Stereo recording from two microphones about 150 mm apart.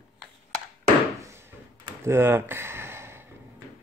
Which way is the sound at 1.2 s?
15° right (ahead or behind).